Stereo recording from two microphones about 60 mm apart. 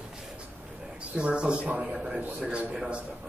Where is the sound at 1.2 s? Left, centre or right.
Centre.